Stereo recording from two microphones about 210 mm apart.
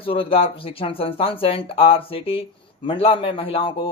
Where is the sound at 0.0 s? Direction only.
25° left (ahead or behind).